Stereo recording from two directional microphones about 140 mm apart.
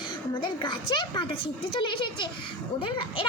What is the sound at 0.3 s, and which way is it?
A woman's voice, 35° left (ahead or behind).